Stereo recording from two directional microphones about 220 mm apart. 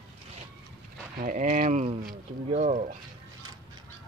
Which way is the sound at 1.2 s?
35° right (ahead or behind).